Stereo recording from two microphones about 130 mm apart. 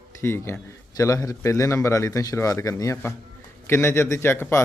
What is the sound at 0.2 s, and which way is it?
A man's voice, 20° left (ahead or behind).